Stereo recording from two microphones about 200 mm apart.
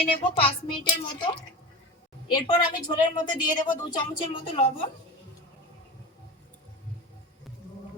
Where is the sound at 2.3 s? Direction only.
25° left (ahead or behind).